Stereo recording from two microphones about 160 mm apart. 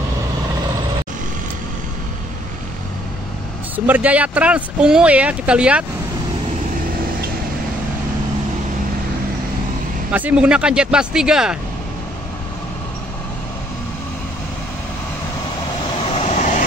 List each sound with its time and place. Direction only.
3.7 s speech: 10° right (ahead or behind)
10.1 s speech: 10° right (ahead or behind)
16.1 s vehicle: 40° left (ahead or behind)